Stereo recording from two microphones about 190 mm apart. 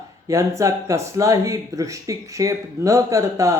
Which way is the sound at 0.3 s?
15° right (ahead or behind).